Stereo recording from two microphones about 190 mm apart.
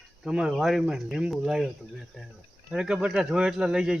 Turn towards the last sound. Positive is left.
turn(degrees=-5)  # may be behind; listen again after turning